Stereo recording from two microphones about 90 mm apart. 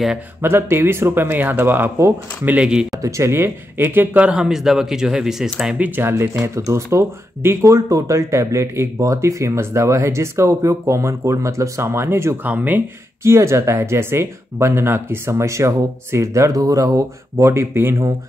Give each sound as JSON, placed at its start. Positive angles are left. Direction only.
{"t": 0.4, "sound": "speech", "side_deg": -25}
{"t": 3.0, "sound": "speech", "side_deg": -35}
{"t": 5.9, "sound": "speech", "side_deg": -30}
{"t": 12.4, "sound": "speech", "side_deg": -20}
{"t": 13.2, "sound": "speech", "side_deg": -30}